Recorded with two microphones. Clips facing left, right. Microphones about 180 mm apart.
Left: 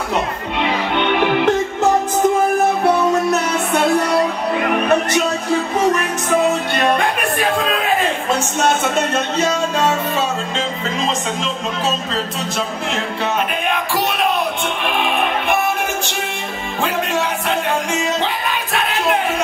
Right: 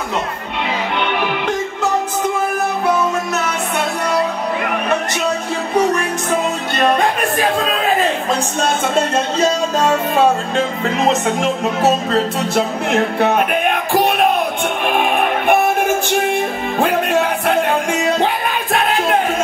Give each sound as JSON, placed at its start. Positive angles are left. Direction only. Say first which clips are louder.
{"t": 8.9, "sound": "speech", "louder": "right 2 dB", "side_deg": -30}
{"t": 10.1, "sound": "music", "louder": "right 6 dB", "side_deg": -55}
{"t": 16.8, "sound": "music", "louder": "right 4 dB", "side_deg": -55}